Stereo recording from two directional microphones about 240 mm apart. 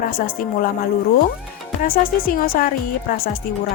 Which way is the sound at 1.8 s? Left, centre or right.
Left.